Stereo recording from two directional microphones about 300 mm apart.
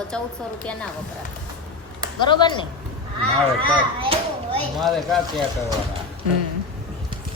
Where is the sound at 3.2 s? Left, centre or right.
Centre.